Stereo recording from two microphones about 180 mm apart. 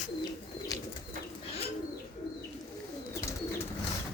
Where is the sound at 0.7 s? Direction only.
20° left (ahead or behind).